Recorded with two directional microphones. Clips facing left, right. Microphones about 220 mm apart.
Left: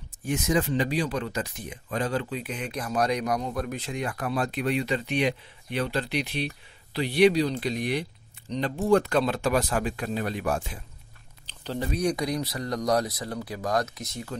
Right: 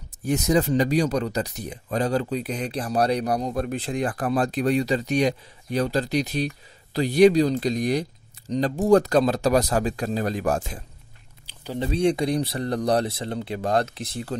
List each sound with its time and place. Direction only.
0.2 s speech: 40° right (ahead or behind)
11.4 s a sound: 10° right (ahead or behind)
11.8 s speech: 25° right (ahead or behind)